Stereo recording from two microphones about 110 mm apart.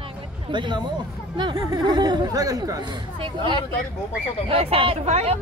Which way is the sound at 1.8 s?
40° right (ahead or behind).